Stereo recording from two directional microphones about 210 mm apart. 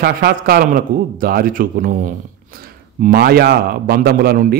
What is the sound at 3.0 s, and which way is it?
A man's voice, 45° right (ahead or behind).